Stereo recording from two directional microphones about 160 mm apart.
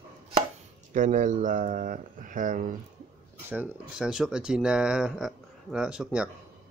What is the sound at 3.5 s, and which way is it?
Speech, 10° right (ahead or behind).